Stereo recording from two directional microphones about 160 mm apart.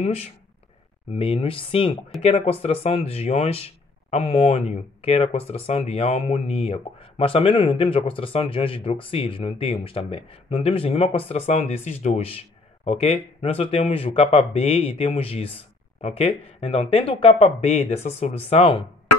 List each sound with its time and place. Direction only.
1.1 s speech: 35° left (ahead or behind)